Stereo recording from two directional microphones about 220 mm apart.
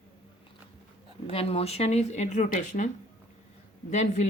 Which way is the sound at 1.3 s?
25° left (ahead or behind).